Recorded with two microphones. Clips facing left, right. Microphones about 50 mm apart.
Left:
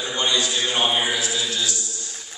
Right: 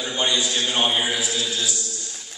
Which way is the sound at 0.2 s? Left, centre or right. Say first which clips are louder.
Even; centre.